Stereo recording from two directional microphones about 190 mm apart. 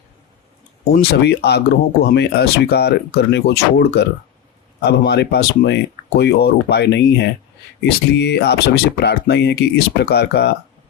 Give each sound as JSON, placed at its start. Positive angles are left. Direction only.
{"t": 0.9, "sound": "speech", "side_deg": 60}